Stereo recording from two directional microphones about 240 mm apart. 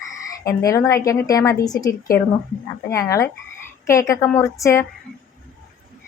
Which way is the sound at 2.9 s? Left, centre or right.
Centre.